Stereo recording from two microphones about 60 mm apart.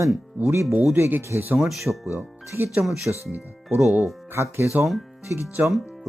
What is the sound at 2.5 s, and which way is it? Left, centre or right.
Speech, right.